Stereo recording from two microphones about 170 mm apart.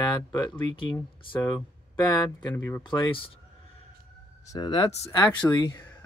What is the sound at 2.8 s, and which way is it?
Speech, 30° left (ahead or behind).